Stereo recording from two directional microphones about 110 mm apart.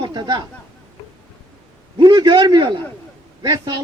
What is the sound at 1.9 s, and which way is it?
A man's voice, 40° right (ahead or behind).